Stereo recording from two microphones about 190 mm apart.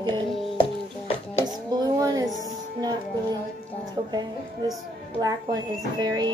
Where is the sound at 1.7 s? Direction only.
20° right (ahead or behind).